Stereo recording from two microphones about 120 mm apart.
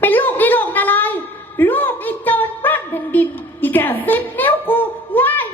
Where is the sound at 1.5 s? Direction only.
15° left (ahead or behind).